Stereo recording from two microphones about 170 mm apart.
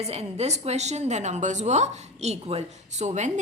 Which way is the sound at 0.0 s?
40° right (ahead or behind).